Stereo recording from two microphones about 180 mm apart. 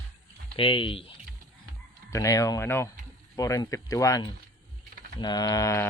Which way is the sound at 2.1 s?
20° left (ahead or behind).